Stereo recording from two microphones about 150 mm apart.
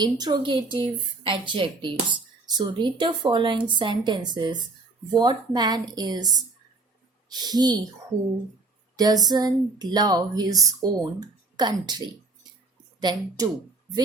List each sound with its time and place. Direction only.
0.0 s speech: 25° right (ahead or behind)
7.3 s speech: 25° right (ahead or behind)
9.0 s speech: 25° right (ahead or behind)